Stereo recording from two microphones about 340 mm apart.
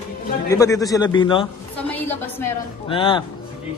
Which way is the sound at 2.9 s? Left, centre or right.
Centre.